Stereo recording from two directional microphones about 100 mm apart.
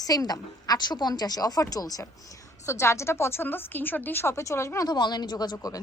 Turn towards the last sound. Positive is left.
turn(degrees=35)  # may be behind; listen again after turning